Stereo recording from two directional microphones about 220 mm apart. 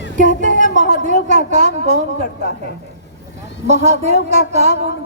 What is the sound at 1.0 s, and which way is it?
Speech, 35° right (ahead or behind).